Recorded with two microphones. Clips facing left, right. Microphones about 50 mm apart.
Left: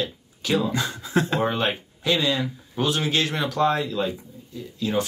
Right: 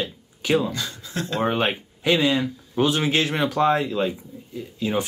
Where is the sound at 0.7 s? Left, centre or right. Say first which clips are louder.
Left 4 dB; left.